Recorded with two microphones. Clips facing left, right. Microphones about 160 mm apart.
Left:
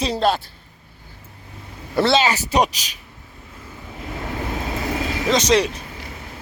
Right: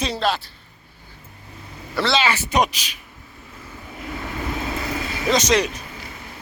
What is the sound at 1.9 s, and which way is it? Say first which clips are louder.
Speech: left 3 dB; 45° left (ahead or behind).